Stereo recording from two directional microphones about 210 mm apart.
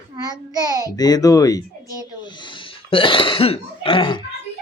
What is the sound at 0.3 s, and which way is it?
Speech, 20° right (ahead or behind).